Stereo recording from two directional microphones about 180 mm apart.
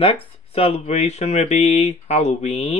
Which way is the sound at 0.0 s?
30° left (ahead or behind).